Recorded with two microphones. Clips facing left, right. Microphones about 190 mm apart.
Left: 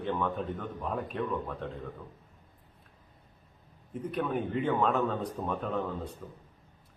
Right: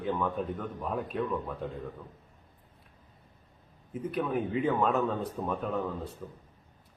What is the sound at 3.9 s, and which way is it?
A man's voice, 5° right (ahead or behind).